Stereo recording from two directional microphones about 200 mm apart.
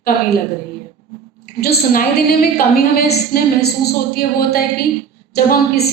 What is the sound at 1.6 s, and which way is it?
A woman's voice, 45° left (ahead or behind).